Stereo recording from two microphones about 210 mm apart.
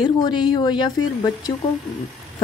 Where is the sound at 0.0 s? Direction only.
20° left (ahead or behind).